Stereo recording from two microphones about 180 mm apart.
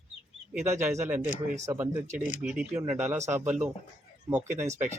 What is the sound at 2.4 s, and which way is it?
Speech, 5° right (ahead or behind).